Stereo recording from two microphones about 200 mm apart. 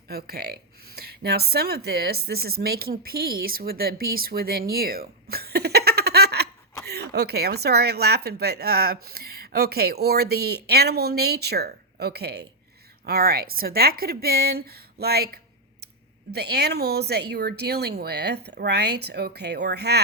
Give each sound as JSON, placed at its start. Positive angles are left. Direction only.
{"t": 0.1, "sound": "speech", "side_deg": -50}